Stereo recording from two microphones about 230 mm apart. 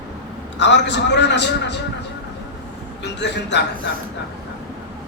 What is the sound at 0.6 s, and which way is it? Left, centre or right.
A man's voice, left.